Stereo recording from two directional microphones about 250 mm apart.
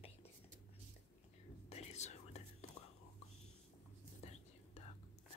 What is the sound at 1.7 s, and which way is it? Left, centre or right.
Whispering, left.